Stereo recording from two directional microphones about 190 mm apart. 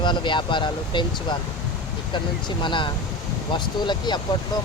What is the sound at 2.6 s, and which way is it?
Speech, 25° left (ahead or behind).